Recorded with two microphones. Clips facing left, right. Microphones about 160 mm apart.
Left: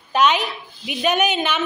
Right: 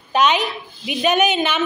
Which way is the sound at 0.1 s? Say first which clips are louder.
Right 1 dB; 10° left (ahead or behind).